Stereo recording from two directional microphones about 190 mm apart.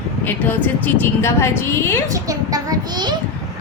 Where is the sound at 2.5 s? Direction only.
20° right (ahead or behind).